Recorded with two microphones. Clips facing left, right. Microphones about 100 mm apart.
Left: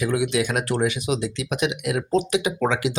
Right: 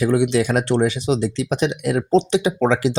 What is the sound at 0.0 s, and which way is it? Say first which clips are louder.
Speech: right 5 dB; 35° right (ahead or behind).